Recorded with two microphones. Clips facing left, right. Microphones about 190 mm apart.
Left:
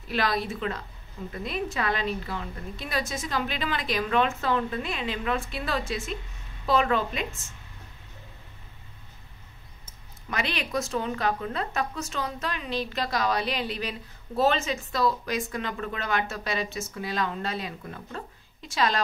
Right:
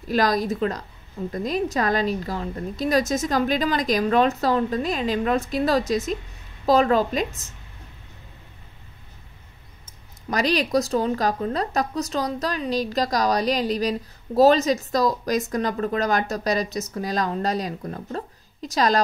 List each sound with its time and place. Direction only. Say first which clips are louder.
0.1 s a woman's voice: right 6 dB; 40° right (ahead or behind)
10.3 s a woman's voice: right 8 dB; 40° right (ahead or behind)